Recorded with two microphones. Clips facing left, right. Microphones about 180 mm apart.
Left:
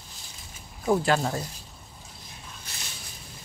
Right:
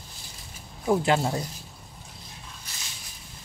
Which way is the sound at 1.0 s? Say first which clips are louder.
Right 1 dB; 20° right (ahead or behind).